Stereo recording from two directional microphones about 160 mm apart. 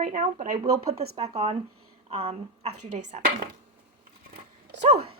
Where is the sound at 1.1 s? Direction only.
40° right (ahead or behind).